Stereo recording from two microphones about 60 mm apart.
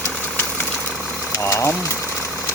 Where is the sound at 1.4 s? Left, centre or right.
Left.